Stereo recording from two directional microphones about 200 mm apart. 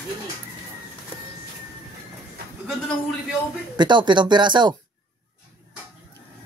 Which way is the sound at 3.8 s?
25° right (ahead or behind).